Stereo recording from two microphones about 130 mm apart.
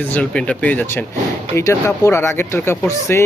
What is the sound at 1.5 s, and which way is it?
Speech, 25° left (ahead or behind).